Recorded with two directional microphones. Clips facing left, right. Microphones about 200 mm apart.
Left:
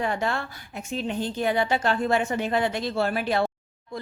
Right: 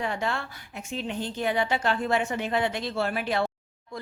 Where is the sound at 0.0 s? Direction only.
45° left (ahead or behind).